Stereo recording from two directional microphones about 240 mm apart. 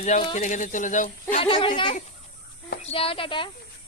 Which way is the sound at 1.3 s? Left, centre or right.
Left.